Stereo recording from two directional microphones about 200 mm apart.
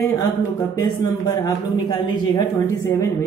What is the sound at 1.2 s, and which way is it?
Speech, 15° left (ahead or behind).